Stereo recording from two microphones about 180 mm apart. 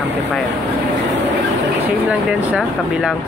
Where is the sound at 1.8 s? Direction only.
10° right (ahead or behind).